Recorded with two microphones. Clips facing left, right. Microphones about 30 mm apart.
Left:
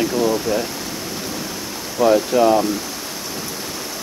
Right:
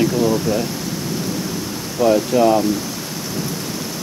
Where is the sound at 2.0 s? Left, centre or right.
Centre.